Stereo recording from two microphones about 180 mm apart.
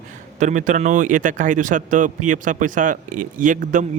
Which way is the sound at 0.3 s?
45° right (ahead or behind).